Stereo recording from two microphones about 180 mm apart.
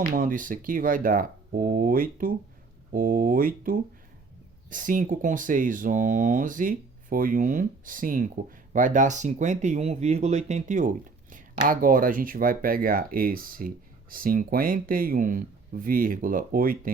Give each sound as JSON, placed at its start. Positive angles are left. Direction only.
{"t": 0.1, "sound": "speech", "side_deg": -50}